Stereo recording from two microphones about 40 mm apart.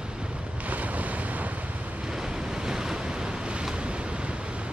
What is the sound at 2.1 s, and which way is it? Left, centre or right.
Waves, centre.